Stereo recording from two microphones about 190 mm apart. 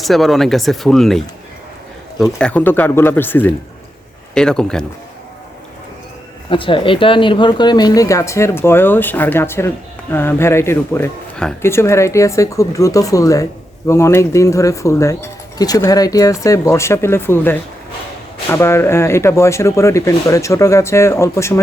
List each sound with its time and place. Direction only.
0.0 s speech: centre (ahead or behind)
2.4 s speech: 5° left (ahead or behind)
6.5 s speech: 25° left (ahead or behind)